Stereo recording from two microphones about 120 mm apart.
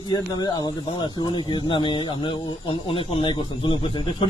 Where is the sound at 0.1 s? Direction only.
35° left (ahead or behind).